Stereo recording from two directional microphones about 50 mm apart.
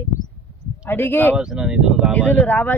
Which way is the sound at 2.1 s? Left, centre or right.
Left.